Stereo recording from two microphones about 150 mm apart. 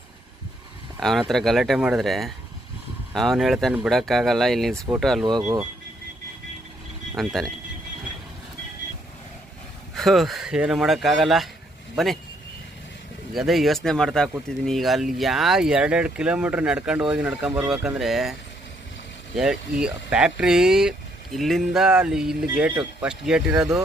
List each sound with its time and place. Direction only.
0.9 s speech: centre (ahead or behind)
5.4 s speech: 20° right (ahead or behind)
7.2 s speech: centre (ahead or behind)
9.9 s speech: centre (ahead or behind)
13.3 s speech: centre (ahead or behind)
19.4 s speech: 5° right (ahead or behind)